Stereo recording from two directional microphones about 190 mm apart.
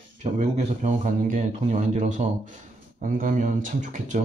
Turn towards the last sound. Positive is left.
turn(degrees=-40)  # may be behind; listen again after turning